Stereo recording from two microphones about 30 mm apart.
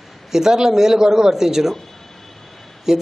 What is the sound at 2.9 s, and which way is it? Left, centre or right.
Speech, centre.